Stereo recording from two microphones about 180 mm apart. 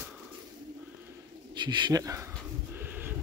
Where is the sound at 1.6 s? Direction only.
25° right (ahead or behind).